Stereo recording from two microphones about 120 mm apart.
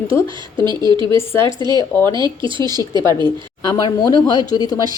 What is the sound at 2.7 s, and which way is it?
Speech, 35° right (ahead or behind).